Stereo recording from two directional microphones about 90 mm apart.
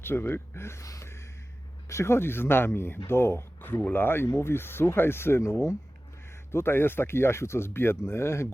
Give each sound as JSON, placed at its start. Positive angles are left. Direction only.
{"t": 0.0, "sound": "speech", "side_deg": 25}